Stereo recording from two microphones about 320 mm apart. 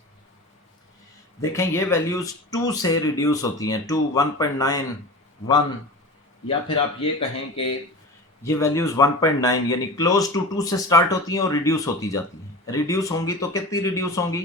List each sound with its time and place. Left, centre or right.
1.4 s speech: centre
6.5 s speech: centre